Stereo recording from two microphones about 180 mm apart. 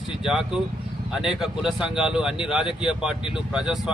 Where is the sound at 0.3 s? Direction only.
Centre (ahead or behind).